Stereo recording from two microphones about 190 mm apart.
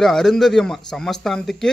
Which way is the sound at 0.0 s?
Centre (ahead or behind).